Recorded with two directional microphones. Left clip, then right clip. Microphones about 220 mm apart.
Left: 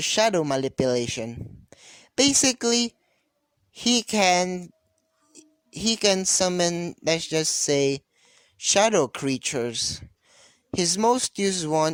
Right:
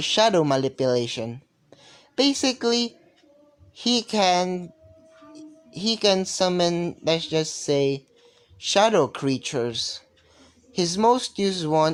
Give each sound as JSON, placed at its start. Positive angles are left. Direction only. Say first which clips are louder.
{"t": 0.0, "sound": "a woman's voice", "louder": "right 2 dB", "side_deg": 50}